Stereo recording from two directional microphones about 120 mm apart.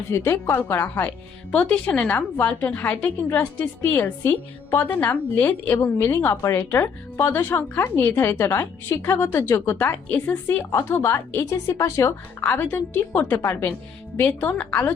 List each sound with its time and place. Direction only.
0.1 s a woman's voice: 25° left (ahead or behind)
12.4 s a woman's voice: 15° left (ahead or behind)